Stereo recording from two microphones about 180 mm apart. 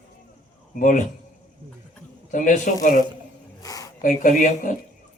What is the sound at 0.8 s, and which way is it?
Speech, 45° left (ahead or behind).